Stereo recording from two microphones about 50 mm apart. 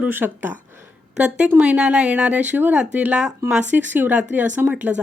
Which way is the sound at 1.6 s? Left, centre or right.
Right.